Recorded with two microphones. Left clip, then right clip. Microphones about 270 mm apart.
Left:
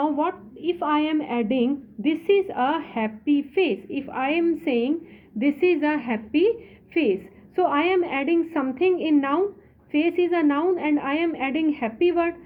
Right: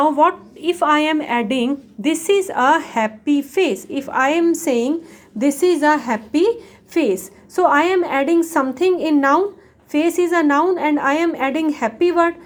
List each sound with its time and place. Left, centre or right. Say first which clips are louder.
0.0 s a woman's voice: right 10 dB; right